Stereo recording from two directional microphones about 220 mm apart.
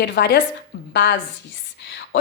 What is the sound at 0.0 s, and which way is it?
Speech, 50° left (ahead or behind).